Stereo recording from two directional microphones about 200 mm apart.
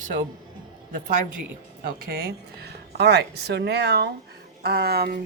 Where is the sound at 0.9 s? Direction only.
40° right (ahead or behind).